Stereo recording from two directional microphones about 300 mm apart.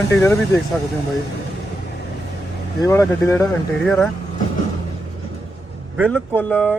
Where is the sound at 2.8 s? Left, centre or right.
Centre.